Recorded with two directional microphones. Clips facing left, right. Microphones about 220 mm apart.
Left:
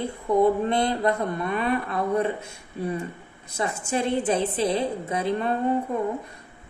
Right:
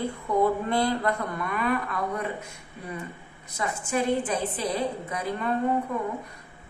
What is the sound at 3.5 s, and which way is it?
A woman's voice, 25° left (ahead or behind).